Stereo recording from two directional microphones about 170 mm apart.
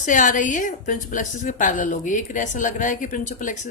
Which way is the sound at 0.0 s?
50° left (ahead or behind).